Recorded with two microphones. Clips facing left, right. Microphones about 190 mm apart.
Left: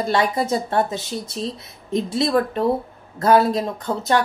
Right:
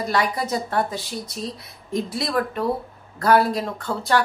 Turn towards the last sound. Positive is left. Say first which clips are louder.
# left 2 dB
turn(degrees=20)  # may be behind; listen again after turning